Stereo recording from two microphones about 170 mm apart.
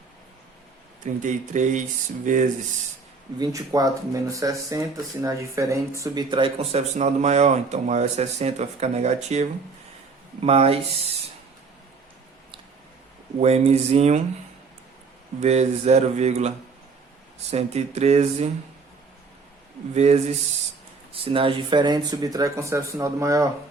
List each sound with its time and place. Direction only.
1.0 s speech: 45° right (ahead or behind)
3.3 s speech: 20° right (ahead or behind)
6.3 s speech: 30° right (ahead or behind)
13.4 s speech: 40° right (ahead or behind)
15.4 s speech: 40° right (ahead or behind)
17.5 s speech: 40° right (ahead or behind)
19.9 s speech: 40° right (ahead or behind); by 23.5 s 20° right (ahead or behind)